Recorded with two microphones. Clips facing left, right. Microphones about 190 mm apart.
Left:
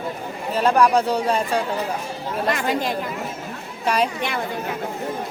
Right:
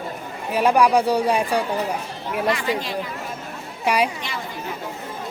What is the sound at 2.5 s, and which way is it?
Speech, 50° left (ahead or behind).